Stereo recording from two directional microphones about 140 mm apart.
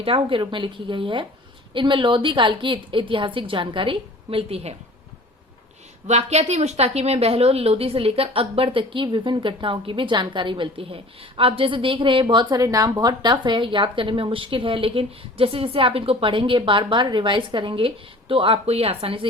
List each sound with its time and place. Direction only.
0.0 s speech: 40° right (ahead or behind)
6.1 s speech: 50° right (ahead or behind)